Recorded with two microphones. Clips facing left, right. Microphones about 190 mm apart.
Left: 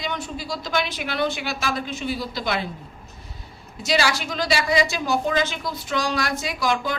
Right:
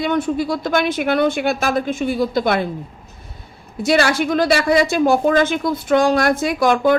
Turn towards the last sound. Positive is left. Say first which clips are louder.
# right 10 dB
turn(degrees=-55)  # may be behind; listen again after turning